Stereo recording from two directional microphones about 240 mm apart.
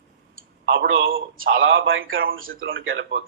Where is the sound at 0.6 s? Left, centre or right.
Right.